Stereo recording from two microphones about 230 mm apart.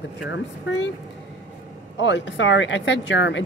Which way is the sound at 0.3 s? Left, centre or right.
Left.